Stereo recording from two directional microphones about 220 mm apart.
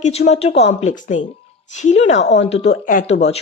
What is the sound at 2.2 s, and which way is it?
Speech, 50° left (ahead or behind).